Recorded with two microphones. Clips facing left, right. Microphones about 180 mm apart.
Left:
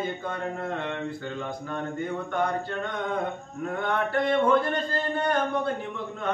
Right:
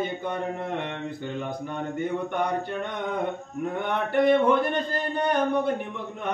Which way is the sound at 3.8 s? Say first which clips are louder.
Right 3 dB; 15° right (ahead or behind).